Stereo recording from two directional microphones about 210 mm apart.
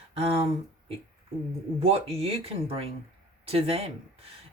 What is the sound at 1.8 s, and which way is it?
Speech, 30° right (ahead or behind).